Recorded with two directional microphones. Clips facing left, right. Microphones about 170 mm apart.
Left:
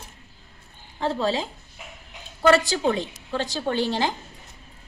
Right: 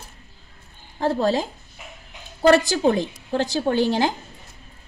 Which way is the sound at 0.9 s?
45° right (ahead or behind).